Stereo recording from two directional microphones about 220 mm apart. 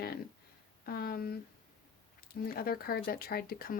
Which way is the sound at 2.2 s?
45° left (ahead or behind).